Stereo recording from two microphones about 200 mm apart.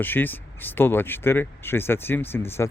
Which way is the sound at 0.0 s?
10° left (ahead or behind).